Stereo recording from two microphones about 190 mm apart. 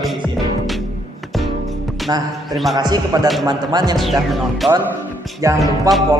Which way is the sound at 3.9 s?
Centre (ahead or behind).